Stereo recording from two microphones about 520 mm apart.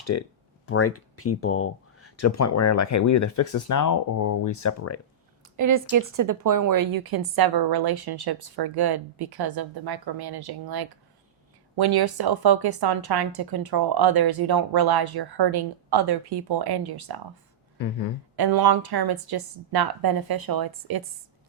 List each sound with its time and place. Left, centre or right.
0.0 s speech: left
5.5 s a woman's voice: right
18.3 s a woman's voice: right